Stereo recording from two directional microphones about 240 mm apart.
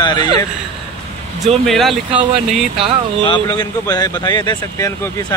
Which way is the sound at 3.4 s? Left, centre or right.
Centre.